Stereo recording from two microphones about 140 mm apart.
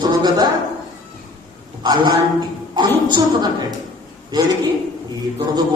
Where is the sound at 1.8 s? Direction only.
30° right (ahead or behind).